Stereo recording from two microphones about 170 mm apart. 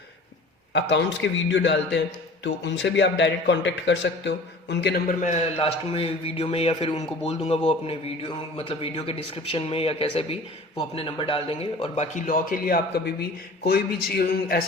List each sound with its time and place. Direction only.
0.7 s a man's voice: 90° left; by 5.4 s 50° left (ahead or behind)
5.5 s speech: 35° left (ahead or behind)
12.1 s speech: 50° left (ahead or behind)